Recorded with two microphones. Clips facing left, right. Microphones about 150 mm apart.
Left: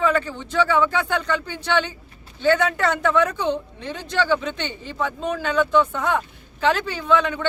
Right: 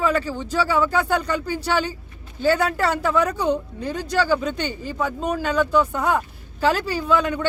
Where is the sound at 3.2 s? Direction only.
35° right (ahead or behind).